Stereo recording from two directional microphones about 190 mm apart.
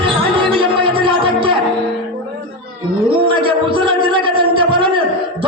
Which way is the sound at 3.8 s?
25° right (ahead or behind).